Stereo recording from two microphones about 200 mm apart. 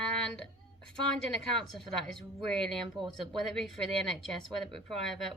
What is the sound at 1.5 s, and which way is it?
Speech, centre (ahead or behind).